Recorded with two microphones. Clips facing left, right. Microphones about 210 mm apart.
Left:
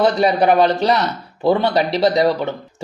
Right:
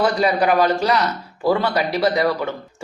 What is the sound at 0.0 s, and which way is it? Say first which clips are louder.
Speech: left 3 dB; 25° left (ahead or behind).